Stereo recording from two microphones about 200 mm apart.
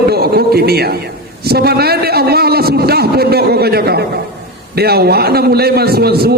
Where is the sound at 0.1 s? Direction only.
50° right (ahead or behind).